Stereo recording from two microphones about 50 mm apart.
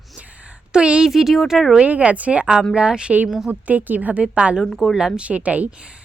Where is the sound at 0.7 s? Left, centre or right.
Centre.